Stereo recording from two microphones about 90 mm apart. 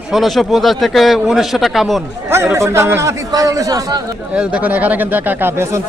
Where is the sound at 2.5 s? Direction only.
35° right (ahead or behind).